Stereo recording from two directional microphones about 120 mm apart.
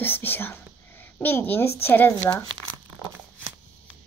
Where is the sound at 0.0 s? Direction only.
15° left (ahead or behind).